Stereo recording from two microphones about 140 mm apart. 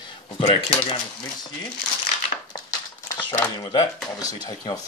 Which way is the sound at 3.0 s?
20° left (ahead or behind).